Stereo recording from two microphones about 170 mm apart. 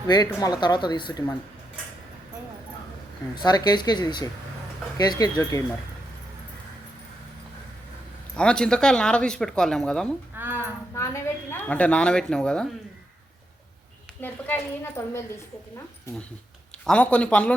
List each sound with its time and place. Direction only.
0.1 s speech: 20° left (ahead or behind)
3.3 s speech: 25° left (ahead or behind)
8.4 s speech: 5° left (ahead or behind)
10.3 s a sound: 10° right (ahead or behind)
10.9 s a woman's voice: 15° left (ahead or behind)
14.2 s a woman's voice: 10° left (ahead or behind)
16.8 s a woman's voice: 5° left (ahead or behind)